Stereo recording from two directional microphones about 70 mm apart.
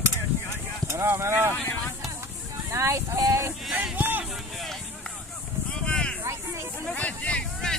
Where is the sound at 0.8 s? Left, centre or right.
Right.